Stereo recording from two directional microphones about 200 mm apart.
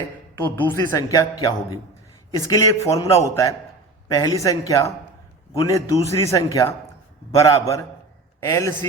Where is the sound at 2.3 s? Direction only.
15° left (ahead or behind).